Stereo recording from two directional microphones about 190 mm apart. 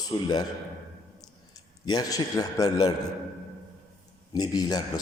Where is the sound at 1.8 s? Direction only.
20° left (ahead or behind).